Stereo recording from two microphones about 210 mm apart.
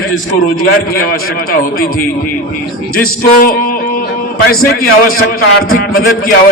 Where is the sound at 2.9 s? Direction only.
45° left (ahead or behind).